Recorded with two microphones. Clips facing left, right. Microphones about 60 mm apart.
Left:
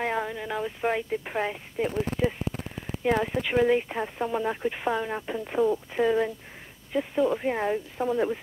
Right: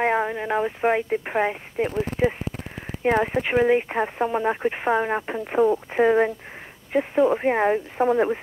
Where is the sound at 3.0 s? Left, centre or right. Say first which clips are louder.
Right 4 dB; right.